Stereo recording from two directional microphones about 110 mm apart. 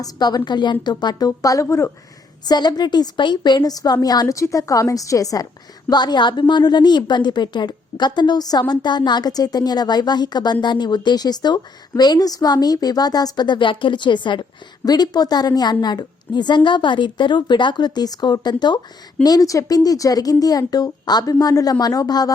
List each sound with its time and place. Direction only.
0.0 s a woman's voice: 40° left (ahead or behind)
2.5 s a woman's voice: 40° left (ahead or behind)